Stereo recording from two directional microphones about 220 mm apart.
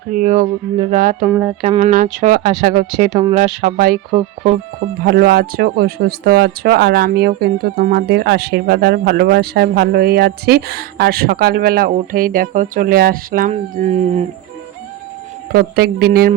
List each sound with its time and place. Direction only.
0.2 s speech: 30° right (ahead or behind)
1.3 s speech: 5° right (ahead or behind)
1.6 s speech: 30° right (ahead or behind)
5.0 s speech: 45° right (ahead or behind)
15.5 s speech: 45° right (ahead or behind)